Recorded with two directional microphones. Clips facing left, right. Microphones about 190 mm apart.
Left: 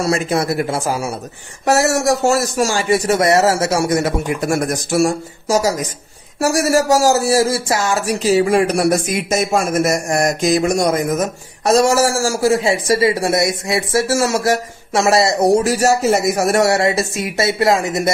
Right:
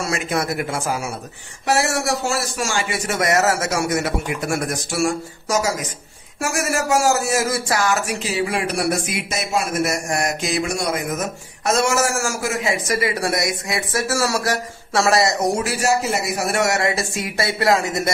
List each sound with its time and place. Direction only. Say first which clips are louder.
0.0 s speech: left 5 dB; 35° left (ahead or behind)
8.1 s a man's voice: left 9 dB; 40° left (ahead or behind)
16.6 s a man's voice: left 5 dB; 25° left (ahead or behind)